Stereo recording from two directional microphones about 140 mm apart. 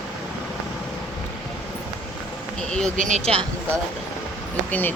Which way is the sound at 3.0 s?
55° right (ahead or behind).